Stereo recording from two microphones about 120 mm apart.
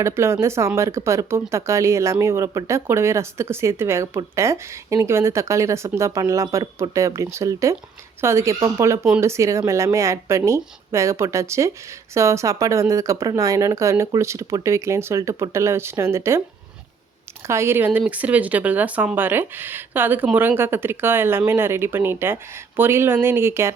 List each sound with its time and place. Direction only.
0.0 s speech: 20° right (ahead or behind)
17.4 s speech: 20° right (ahead or behind)